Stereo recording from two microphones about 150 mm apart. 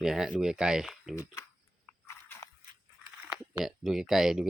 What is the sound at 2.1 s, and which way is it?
Biting, 20° left (ahead or behind).